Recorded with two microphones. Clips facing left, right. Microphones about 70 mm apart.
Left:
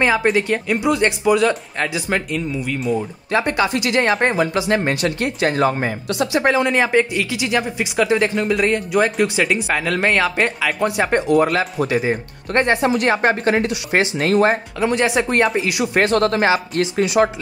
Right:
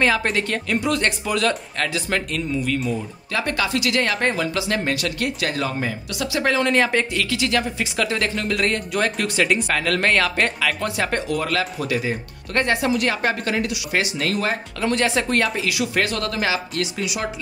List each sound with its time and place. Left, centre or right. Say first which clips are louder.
0.0 s speech: left 4 dB; centre
3.3 s speech: left 5 dB; left; by 10.7 s centre
10.8 s speech: left 5 dB; left
14.8 s speech: left 1 dB; centre; by 17.3 s left